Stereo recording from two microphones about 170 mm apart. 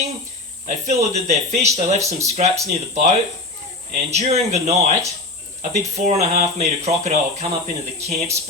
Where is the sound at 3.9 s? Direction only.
40° right (ahead or behind).